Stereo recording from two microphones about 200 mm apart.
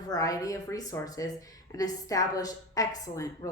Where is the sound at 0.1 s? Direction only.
15° left (ahead or behind).